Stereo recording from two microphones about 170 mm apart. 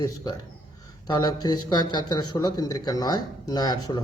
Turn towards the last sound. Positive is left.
turn(degrees=25)  # may be behind; listen again after turning